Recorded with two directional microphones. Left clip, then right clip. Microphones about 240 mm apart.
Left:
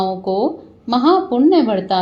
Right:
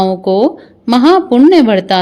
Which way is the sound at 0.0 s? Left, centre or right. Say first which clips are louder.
Right 7 dB; right.